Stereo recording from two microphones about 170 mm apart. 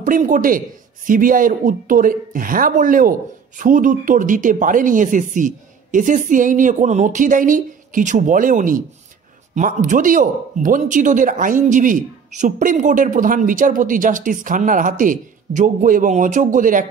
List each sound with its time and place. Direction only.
0.0 s speech: 55° right (ahead or behind)